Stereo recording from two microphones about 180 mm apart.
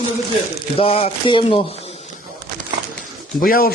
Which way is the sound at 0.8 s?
30° left (ahead or behind).